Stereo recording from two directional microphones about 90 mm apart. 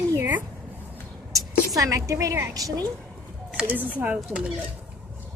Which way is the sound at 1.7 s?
40° right (ahead or behind).